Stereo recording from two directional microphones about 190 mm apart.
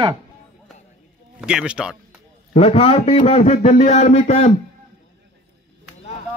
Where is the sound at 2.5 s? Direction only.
30° left (ahead or behind).